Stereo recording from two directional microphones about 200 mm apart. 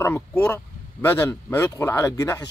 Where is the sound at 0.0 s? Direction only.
10° left (ahead or behind).